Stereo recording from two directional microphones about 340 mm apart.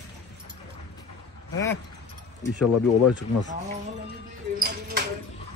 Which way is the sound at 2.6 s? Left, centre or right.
Left.